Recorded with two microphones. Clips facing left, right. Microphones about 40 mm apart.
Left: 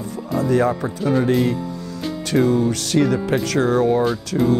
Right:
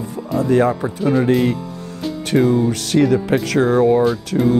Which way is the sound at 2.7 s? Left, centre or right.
Right.